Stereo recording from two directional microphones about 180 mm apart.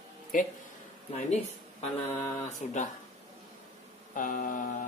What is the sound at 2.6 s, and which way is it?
Speech, 40° left (ahead or behind).